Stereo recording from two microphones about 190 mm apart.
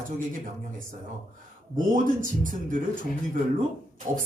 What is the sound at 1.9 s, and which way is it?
Speech, 45° right (ahead or behind).